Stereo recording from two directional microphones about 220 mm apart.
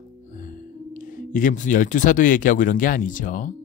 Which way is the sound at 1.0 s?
35° left (ahead or behind).